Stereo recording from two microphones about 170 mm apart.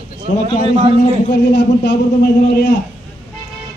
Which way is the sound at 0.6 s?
35° right (ahead or behind).